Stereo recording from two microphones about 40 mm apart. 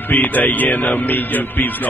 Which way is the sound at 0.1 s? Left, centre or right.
Left.